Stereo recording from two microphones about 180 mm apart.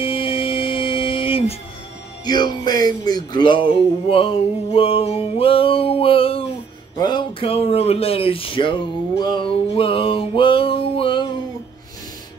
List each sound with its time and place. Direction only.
0.0 s music: 30° left (ahead or behind)
7.0 s speech: 25° left (ahead or behind)